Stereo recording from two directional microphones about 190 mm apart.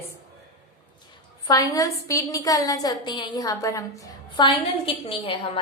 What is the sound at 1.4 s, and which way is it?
A woman's voice, 20° left (ahead or behind).